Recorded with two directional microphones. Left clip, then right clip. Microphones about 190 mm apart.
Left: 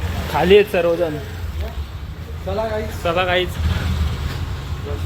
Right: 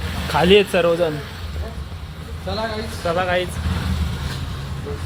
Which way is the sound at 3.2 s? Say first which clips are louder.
Left 2 dB; 35° left (ahead or behind).